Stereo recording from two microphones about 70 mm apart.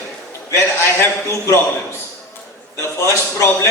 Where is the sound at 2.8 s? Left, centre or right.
Left.